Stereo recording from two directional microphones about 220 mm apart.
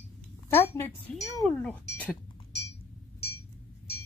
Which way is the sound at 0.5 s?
10° left (ahead or behind).